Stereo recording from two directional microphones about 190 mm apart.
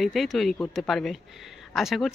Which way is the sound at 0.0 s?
Centre (ahead or behind).